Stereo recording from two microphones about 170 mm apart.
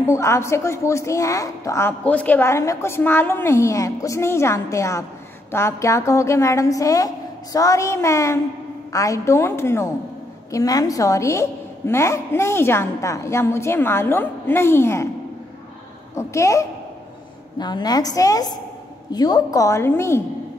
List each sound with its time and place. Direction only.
0.0 s a woman's voice: 15° left (ahead or behind)
16.2 s a woman's voice: 20° left (ahead or behind)